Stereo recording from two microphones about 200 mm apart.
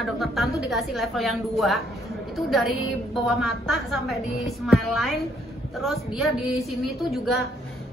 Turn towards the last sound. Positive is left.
turn(degrees=0)  # may be behind; listen again after turning